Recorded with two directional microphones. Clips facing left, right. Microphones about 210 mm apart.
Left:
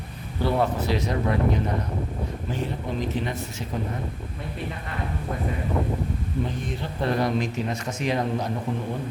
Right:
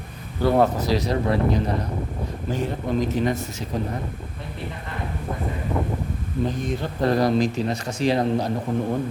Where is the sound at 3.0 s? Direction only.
45° right (ahead or behind).